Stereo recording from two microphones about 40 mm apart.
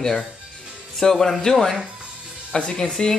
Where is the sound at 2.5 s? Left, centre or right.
Left.